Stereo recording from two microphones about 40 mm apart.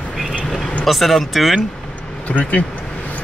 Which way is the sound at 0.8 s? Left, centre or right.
Centre.